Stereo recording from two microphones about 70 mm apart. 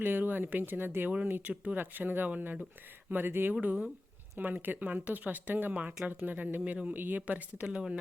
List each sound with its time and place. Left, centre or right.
0.0 s speech: right